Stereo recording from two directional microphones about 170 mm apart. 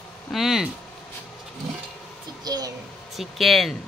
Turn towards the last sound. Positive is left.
turn(degrees=0)  # may be behind; listen again after turning